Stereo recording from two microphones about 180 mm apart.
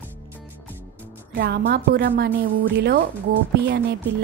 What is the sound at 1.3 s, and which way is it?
A woman's voice, 70° right (ahead or behind).